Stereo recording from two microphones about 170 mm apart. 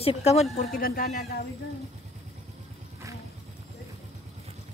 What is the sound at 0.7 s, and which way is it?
Speech, 55° left (ahead or behind).